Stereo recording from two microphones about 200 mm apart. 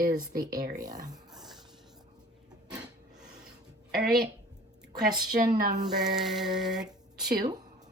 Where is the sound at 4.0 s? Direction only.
5° right (ahead or behind).